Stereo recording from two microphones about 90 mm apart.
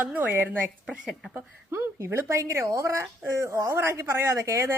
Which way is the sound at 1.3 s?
30° right (ahead or behind).